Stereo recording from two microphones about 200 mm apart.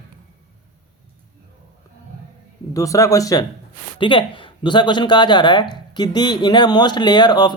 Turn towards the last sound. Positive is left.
turn(degrees=20)  # may be behind; listen again after turning